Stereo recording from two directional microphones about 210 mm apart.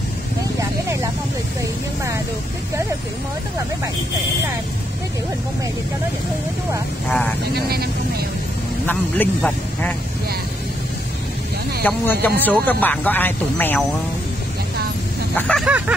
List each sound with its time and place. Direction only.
7.1 s speech: 5° left (ahead or behind)
7.5 s speech: 50° right (ahead or behind)
8.8 s speech: 10° left (ahead or behind)
11.8 s speech: 10° left (ahead or behind)
15.3 s speech: 5° left (ahead or behind)